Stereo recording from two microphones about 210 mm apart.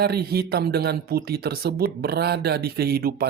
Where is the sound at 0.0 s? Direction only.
50° right (ahead or behind).